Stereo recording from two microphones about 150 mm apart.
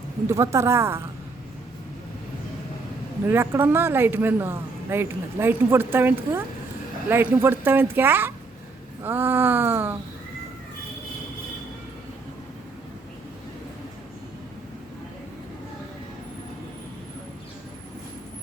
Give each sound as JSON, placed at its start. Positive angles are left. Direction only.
{"t": 0.3, "sound": "speech", "side_deg": -20}
{"t": 3.2, "sound": "speech", "side_deg": -15}